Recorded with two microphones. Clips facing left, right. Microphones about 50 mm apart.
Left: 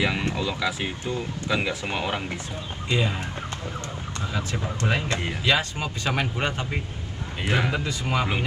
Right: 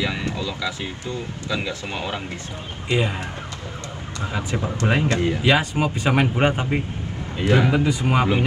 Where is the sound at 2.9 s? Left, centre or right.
Right.